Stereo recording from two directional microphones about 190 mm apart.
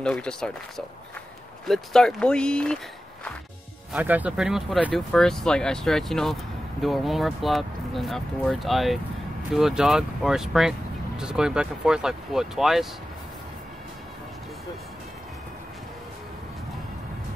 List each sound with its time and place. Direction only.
0.0 s speech: 5° left (ahead or behind)
3.9 s speech: 10° right (ahead or behind)